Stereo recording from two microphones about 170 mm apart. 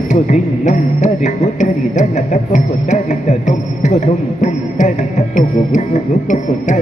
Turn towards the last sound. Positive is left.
turn(degrees=45)  # may be behind; listen again after turning